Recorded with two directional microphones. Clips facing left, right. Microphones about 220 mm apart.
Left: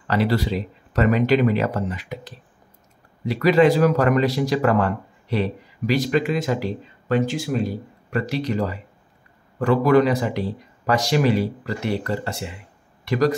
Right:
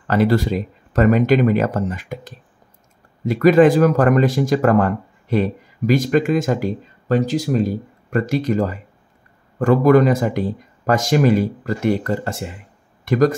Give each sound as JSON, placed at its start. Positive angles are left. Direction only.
{"t": 0.0, "sound": "speech", "side_deg": -45}